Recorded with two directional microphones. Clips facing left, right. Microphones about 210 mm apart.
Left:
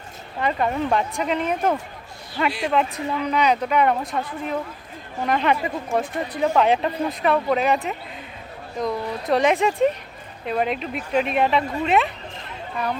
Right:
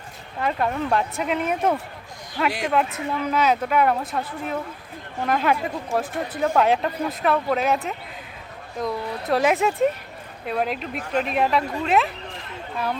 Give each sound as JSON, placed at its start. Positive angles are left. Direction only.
{"t": 0.3, "sound": "speech", "side_deg": 0}